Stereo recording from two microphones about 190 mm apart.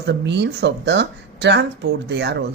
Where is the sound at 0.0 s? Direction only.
65° right (ahead or behind).